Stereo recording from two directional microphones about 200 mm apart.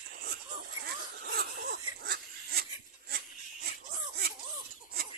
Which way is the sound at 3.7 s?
50° right (ahead or behind).